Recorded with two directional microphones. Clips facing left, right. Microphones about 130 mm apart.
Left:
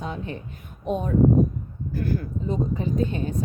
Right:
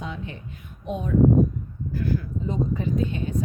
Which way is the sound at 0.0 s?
40° left (ahead or behind).